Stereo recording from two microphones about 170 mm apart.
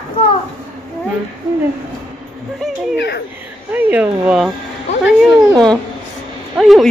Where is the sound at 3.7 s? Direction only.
10° right (ahead or behind).